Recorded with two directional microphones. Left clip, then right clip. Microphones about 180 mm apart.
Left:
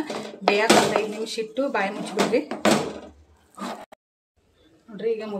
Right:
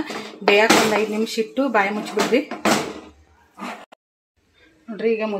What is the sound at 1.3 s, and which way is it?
Speech, 40° right (ahead or behind).